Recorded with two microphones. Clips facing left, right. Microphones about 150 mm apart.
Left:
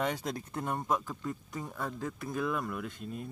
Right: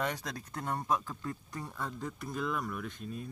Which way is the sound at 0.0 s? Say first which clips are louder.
Left 3 dB; 25° left (ahead or behind).